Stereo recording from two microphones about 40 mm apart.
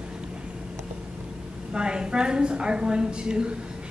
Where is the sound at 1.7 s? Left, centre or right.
Right.